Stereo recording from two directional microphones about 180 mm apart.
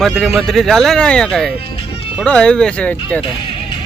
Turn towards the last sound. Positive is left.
turn(degrees=5)  # may be behind; listen again after turning